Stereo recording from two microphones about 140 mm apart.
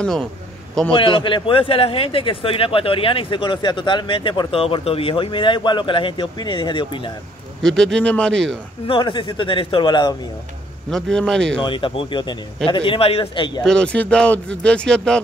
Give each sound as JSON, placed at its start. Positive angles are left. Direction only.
{"t": 0.0, "sound": "a man's voice", "side_deg": 5}
{"t": 0.9, "sound": "a man's voice", "side_deg": 35}
{"t": 7.6, "sound": "a man's voice", "side_deg": 5}
{"t": 8.8, "sound": "a man's voice", "side_deg": 35}
{"t": 10.9, "sound": "a man's voice", "side_deg": 5}
{"t": 11.6, "sound": "a man's voice", "side_deg": 35}
{"t": 13.7, "sound": "speech", "side_deg": 5}